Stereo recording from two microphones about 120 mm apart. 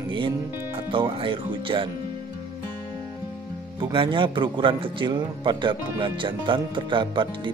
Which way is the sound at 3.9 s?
45° right (ahead or behind).